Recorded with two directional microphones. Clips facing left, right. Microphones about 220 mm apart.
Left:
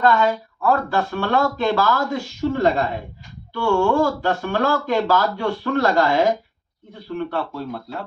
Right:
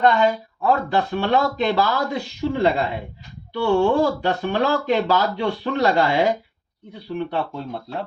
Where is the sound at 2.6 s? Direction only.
45° left (ahead or behind).